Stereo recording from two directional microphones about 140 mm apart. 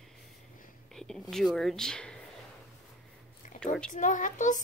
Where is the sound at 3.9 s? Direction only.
65° left (ahead or behind).